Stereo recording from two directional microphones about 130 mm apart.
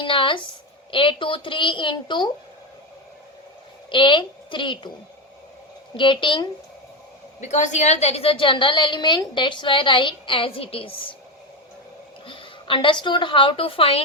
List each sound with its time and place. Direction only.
0.0 s a sound: 40° left (ahead or behind)
0.9 s a woman's voice: 40° left (ahead or behind)
3.9 s a woman's voice: 40° left (ahead or behind)
6.0 s a woman's voice: 40° left (ahead or behind)
7.4 s a woman's voice: 65° left (ahead or behind); by 10.9 s 45° left (ahead or behind)
12.2 s a woman's voice: 40° left (ahead or behind)